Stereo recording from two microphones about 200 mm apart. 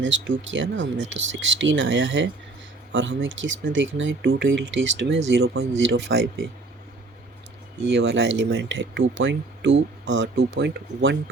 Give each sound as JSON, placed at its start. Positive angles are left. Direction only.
{"t": 0.0, "sound": "speech", "side_deg": -65}
{"t": 7.9, "sound": "speech", "side_deg": -65}